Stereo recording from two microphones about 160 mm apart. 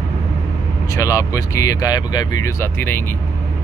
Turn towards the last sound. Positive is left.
turn(degrees=15)  # may be behind; listen again after turning